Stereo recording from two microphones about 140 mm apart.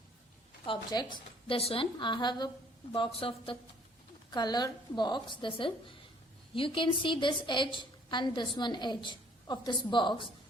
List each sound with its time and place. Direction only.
0.6 s a woman's voice: 35° left (ahead or behind)